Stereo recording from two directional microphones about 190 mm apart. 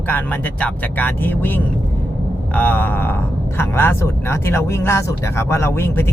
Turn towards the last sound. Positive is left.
turn(degrees=10)  # may be behind; listen again after turning